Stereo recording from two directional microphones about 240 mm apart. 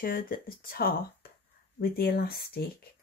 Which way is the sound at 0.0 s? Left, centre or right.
Left.